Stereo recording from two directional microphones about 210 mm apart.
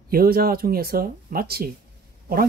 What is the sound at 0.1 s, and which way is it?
Speech, 45° right (ahead or behind).